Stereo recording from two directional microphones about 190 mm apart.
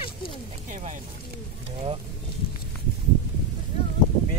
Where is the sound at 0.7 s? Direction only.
40° right (ahead or behind).